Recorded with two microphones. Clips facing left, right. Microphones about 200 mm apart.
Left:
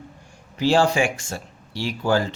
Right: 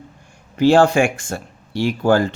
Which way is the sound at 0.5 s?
55° right (ahead or behind).